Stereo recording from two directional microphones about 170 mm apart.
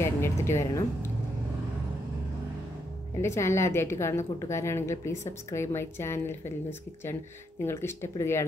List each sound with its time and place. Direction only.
0.0 s a woman's voice: 15° left (ahead or behind)
3.2 s a woman's voice: 15° left (ahead or behind)
7.6 s a woman's voice: 15° left (ahead or behind)